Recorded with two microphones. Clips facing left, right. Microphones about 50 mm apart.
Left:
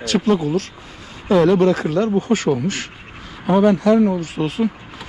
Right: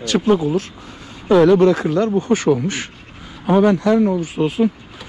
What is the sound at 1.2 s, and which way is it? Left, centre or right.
Speech, right.